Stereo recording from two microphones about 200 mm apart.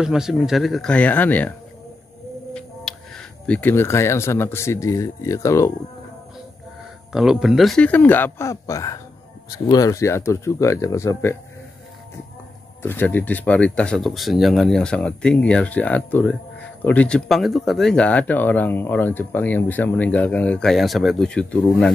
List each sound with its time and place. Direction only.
0.0 s speech: centre (ahead or behind)
2.5 s speech: centre (ahead or behind)
7.1 s speech: 5° right (ahead or behind); by 11.3 s 15° left (ahead or behind)
12.8 s speech: 10° left (ahead or behind)